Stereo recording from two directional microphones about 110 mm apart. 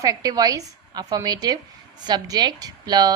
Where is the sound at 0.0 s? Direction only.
35° right (ahead or behind).